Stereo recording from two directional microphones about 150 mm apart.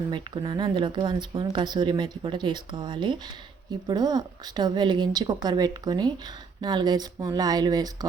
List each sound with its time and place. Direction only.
0.1 s a woman's voice: 30° right (ahead or behind)